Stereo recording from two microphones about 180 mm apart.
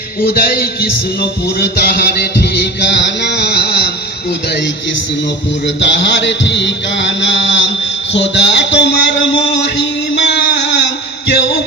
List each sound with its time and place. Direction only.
0.3 s music: 60° left (ahead or behind)
2.9 s a sound: 75° left (ahead or behind)
5.8 s mantra: 75° left (ahead or behind)